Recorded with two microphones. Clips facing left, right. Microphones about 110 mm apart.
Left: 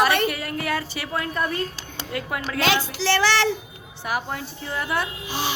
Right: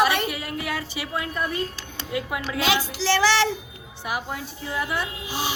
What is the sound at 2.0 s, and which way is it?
A child's voice, 10° right (ahead or behind).